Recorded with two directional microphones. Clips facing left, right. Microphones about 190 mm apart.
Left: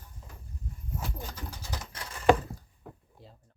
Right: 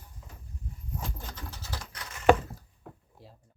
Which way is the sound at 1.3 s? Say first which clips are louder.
Left 1 dB; 10° left (ahead or behind).